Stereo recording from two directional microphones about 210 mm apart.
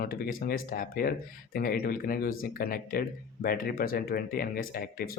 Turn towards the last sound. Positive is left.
turn(degrees=45)  # may be behind; listen again after turning